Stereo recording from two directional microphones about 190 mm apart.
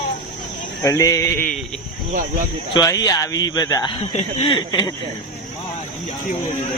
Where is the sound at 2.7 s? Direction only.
20° left (ahead or behind).